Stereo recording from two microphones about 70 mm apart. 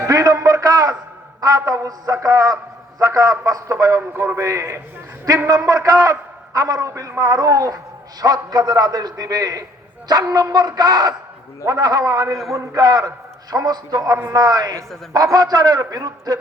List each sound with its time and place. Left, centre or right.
0.0 s a sound: right
1.4 s a man's voice: right
4.1 s a man's voice: right
4.4 s a man's voice: right
5.6 s a man's voice: right
7.2 s a man's voice: right
8.2 s a man's voice: right
10.1 s a man's voice: right
12.8 s a man's voice: right
15.8 s a man's voice: right